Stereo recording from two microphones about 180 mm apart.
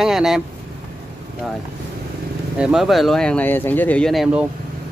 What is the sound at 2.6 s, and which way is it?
Speech, 5° right (ahead or behind).